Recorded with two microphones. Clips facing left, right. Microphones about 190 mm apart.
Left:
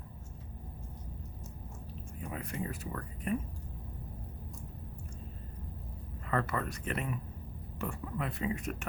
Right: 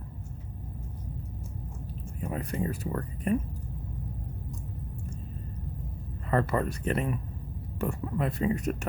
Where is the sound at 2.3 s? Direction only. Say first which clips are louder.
Right 7 dB; 40° right (ahead or behind).